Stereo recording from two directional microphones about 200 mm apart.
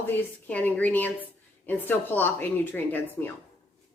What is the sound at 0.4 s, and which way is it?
Speech, 5° left (ahead or behind).